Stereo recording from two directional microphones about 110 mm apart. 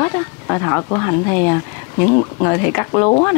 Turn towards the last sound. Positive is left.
turn(degrees=30)  # may be behind; listen again after turning